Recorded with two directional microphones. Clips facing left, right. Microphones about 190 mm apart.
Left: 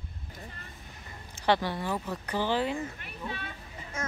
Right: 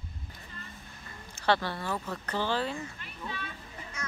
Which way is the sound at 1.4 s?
15° left (ahead or behind).